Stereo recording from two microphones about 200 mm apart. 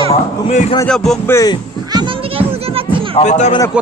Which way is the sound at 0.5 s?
35° left (ahead or behind).